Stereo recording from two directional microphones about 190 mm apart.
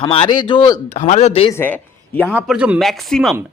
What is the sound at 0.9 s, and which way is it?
Speech, 35° left (ahead or behind).